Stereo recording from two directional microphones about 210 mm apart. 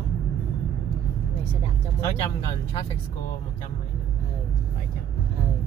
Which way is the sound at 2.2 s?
25° left (ahead or behind).